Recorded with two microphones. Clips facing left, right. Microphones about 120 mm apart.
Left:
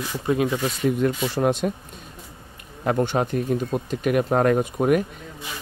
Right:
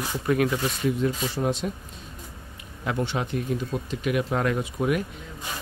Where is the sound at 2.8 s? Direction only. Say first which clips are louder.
Left 6 dB; 45° left (ahead or behind).